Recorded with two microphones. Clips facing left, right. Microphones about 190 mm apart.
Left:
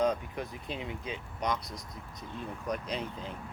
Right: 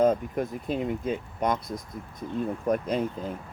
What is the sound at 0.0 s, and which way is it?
Speech, 50° right (ahead or behind).